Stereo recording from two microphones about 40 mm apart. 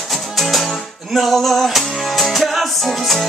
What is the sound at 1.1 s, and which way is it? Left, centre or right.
Music, centre.